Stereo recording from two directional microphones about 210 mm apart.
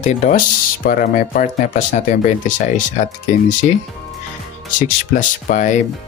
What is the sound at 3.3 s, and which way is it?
Speech, 35° left (ahead or behind).